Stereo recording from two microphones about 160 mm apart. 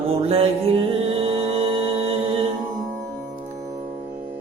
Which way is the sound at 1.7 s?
35° right (ahead or behind).